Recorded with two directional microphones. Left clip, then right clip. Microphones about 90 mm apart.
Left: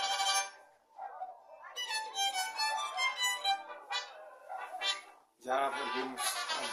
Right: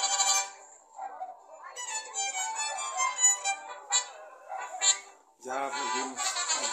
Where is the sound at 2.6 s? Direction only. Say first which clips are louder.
Right 1 dB; 25° right (ahead or behind).